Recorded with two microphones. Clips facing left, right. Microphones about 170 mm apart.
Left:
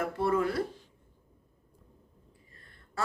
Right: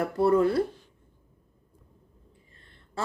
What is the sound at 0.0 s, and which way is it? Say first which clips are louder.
Speech: right 6 dB; 35° right (ahead or behind).